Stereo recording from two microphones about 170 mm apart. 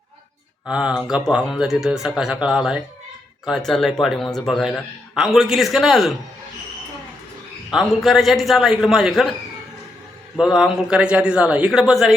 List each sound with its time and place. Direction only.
0.7 s speech: 5° right (ahead or behind)
7.7 s speech: centre (ahead or behind)
10.3 s speech: 5° right (ahead or behind)